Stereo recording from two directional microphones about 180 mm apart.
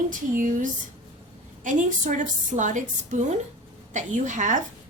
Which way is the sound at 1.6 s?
45° right (ahead or behind).